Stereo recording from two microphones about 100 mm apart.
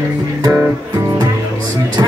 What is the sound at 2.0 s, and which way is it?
Music, 35° right (ahead or behind).